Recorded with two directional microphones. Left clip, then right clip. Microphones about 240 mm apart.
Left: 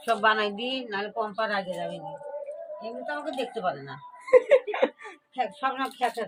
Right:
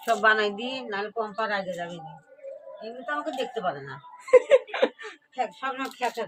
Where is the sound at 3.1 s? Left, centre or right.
Centre.